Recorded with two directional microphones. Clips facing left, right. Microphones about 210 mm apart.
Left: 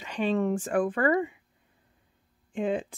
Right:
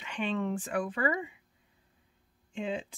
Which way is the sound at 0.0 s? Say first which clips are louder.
Left 6 dB; 40° left (ahead or behind).